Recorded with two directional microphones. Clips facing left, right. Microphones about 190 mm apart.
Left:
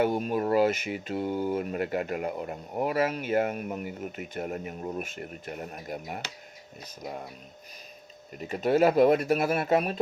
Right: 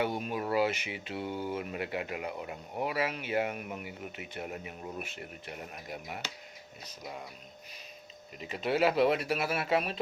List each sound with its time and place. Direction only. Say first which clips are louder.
0.0 s speech: left 6 dB; 45° left (ahead or behind)
8.4 s speech: left 6 dB; 45° left (ahead or behind)